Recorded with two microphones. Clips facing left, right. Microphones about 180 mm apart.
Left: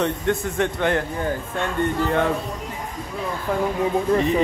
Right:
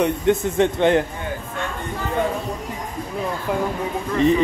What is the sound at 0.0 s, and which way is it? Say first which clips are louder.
Speech: right 4 dB; 20° right (ahead or behind).